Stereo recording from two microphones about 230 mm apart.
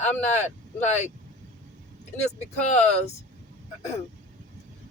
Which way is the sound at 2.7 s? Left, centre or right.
Left.